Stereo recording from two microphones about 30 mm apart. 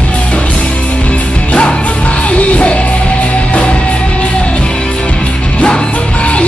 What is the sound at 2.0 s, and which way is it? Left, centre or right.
Music, left.